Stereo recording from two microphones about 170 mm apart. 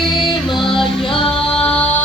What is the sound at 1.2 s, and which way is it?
Music, 5° left (ahead or behind).